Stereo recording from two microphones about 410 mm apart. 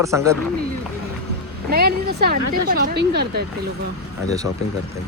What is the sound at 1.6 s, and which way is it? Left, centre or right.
Speech, right.